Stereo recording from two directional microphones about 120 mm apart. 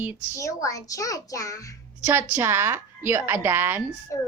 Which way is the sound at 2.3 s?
20° right (ahead or behind).